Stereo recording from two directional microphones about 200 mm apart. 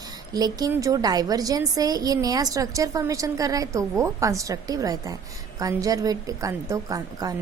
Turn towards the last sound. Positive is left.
turn(degrees=-15)  # may be behind; listen again after turning